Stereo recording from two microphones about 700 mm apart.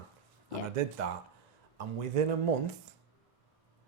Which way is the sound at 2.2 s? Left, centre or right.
Right.